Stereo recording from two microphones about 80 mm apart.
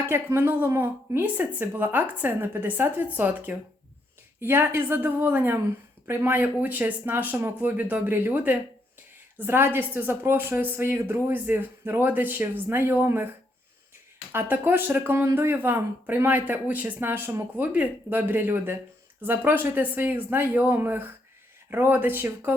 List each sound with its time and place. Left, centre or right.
0.1 s speech: right
14.3 s speech: right